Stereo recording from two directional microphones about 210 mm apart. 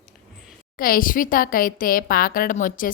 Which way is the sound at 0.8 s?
40° left (ahead or behind).